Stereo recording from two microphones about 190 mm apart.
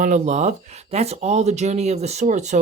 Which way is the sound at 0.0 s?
40° right (ahead or behind).